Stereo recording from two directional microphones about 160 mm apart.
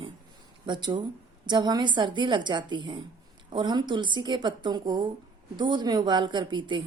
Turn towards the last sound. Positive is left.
turn(degrees=-30)  # may be behind; listen again after turning